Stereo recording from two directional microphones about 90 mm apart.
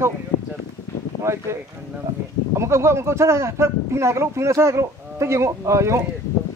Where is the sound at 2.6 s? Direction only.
30° right (ahead or behind).